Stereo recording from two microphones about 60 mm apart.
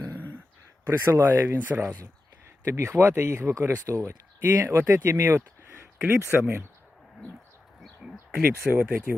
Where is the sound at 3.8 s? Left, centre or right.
Right.